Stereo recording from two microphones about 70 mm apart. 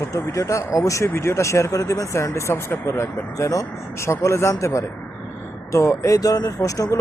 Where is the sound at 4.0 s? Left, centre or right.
Left.